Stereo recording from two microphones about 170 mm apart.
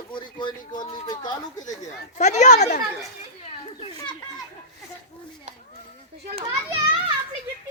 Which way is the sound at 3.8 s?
30° left (ahead or behind).